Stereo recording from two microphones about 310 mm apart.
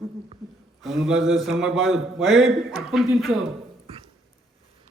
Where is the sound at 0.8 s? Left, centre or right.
Centre.